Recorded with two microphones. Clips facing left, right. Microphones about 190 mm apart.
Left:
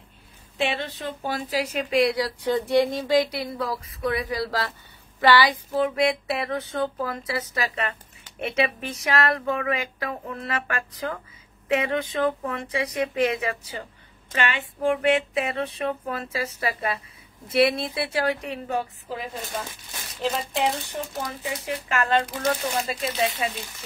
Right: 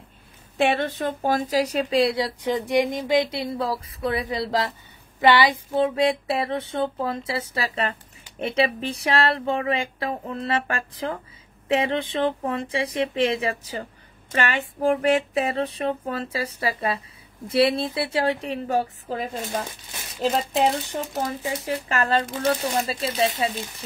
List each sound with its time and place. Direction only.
0.6 s a woman's voice: 50° right (ahead or behind); by 13.8 s 35° right (ahead or behind)
14.3 s speech: 45° right (ahead or behind)